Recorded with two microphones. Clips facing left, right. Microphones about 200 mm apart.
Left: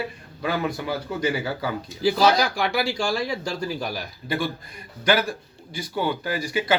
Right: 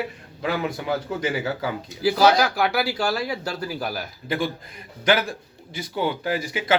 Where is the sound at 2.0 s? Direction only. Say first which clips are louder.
Right 1 dB; 5° right (ahead or behind).